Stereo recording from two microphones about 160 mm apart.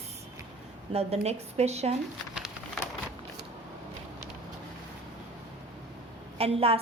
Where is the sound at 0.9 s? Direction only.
40° right (ahead or behind).